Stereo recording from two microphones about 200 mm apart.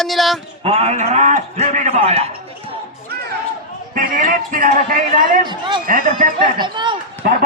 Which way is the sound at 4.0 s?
40° right (ahead or behind).